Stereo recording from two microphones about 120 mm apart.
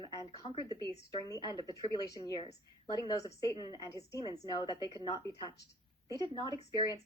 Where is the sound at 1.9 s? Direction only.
35° left (ahead or behind).